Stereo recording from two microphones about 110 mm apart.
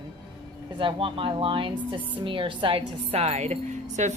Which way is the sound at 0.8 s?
50° right (ahead or behind).